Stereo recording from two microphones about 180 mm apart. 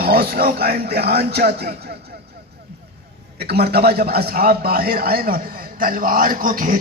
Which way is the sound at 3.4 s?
65° right (ahead or behind).